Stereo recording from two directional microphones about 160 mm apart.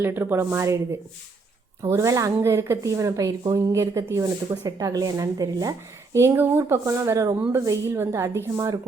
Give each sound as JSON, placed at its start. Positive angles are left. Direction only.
{"t": 0.0, "sound": "a woman's voice", "side_deg": -15}
{"t": 1.8, "sound": "a woman's voice", "side_deg": -20}